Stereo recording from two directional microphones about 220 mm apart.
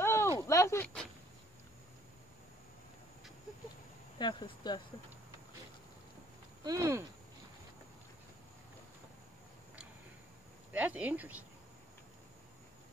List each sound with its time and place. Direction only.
0.0 s a sound: 10° left (ahead or behind)
4.2 s speech: 20° left (ahead or behind)
6.6 s speech: 15° right (ahead or behind)
10.7 s speech: 5° right (ahead or behind)